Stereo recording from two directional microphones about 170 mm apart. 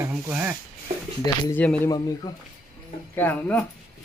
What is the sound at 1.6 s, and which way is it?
Speech, 10° left (ahead or behind).